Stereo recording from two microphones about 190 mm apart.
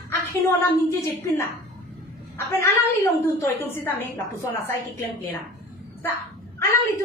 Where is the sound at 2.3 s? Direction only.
15° left (ahead or behind).